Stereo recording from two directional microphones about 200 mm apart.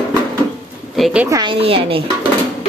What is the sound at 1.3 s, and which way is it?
Speech, 25° right (ahead or behind).